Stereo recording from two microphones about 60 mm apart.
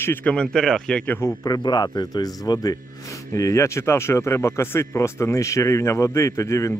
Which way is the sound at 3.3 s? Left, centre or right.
Left.